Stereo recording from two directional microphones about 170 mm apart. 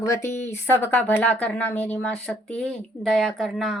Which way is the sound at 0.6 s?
15° left (ahead or behind).